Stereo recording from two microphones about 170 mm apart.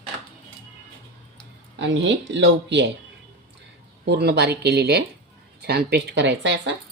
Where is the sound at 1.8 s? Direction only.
90° right.